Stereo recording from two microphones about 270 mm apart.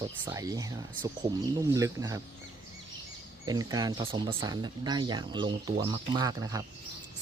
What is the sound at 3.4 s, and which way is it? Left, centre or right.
Speech, centre.